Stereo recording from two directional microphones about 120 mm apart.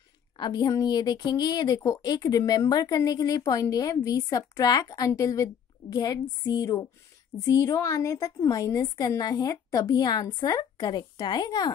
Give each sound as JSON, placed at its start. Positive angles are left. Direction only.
{"t": 0.4, "sound": "a woman's voice", "side_deg": 35}